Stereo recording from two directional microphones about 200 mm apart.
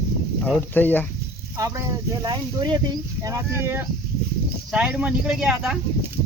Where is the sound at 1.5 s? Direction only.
15° right (ahead or behind).